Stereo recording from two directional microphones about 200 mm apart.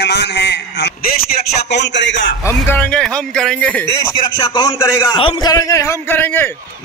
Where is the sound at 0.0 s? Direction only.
60° left (ahead or behind).